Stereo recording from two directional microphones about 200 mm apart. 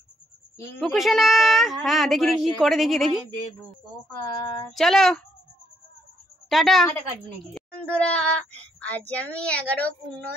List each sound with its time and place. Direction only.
0.7 s speech: centre (ahead or behind)
4.4 s speech: 20° left (ahead or behind)
4.7 s speech: centre (ahead or behind)
6.5 s a woman's voice: centre (ahead or behind)